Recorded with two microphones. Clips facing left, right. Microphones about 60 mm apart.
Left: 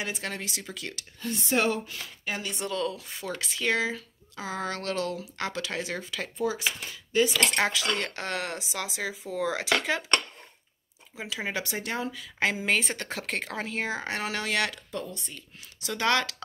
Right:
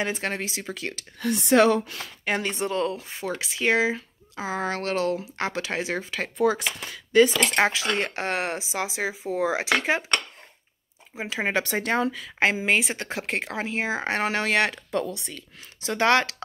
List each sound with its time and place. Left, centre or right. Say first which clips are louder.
0.0 s speech: right 6 dB; right
1.2 s speech: right 8 dB; right
2.5 s speech: right 5 dB; right
6.2 s speech: right 6 dB; right
7.3 s speech: right 4 dB; right
11.1 s speech: right 5 dB; right
11.4 s speech: right 8 dB; right
12.4 s speech: right 4 dB; right
14.0 s speech: right 6 dB; right
14.9 s speech: right 8 dB; right
15.8 s speech: right 5 dB; right